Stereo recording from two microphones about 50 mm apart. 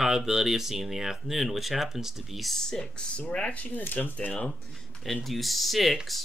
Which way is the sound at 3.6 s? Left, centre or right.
Left.